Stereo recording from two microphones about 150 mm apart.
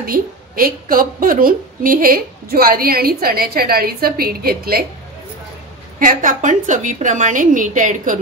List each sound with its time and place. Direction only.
0.0 s a woman's voice: 75° right (ahead or behind); by 4.8 s 90° right
5.9 s a woman's voice: 60° right (ahead or behind)